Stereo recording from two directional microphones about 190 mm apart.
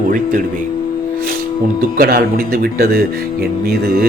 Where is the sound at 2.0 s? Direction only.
50° right (ahead or behind).